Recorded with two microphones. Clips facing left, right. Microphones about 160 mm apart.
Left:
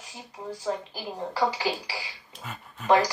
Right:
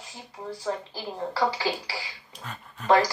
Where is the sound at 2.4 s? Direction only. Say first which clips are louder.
Even; 5° left (ahead or behind).